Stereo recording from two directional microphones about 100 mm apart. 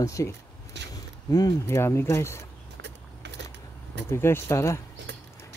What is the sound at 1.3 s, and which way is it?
Speech, 40° left (ahead or behind).